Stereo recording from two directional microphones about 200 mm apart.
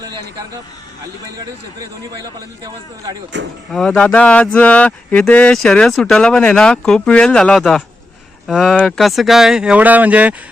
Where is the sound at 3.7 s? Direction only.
Centre (ahead or behind).